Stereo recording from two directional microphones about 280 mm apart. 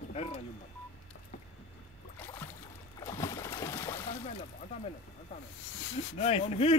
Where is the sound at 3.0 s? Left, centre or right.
Centre.